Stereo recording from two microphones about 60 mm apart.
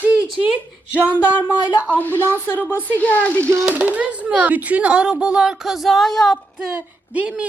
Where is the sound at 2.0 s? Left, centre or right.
Left.